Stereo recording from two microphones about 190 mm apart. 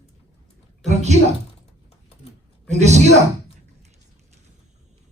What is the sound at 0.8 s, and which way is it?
Speech, 35° right (ahead or behind).